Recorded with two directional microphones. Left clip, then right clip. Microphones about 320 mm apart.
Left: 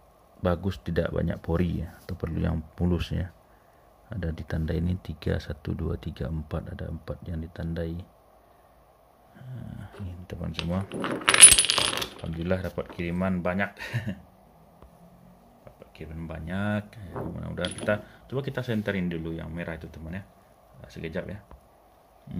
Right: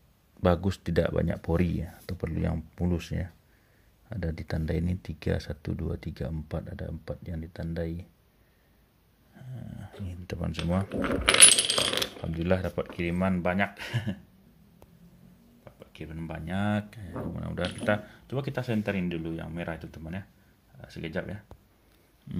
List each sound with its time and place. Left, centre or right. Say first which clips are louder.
0.4 s speech: right 2 dB; centre
9.4 s speech: left 1 dB; centre
15.6 s speech: even; centre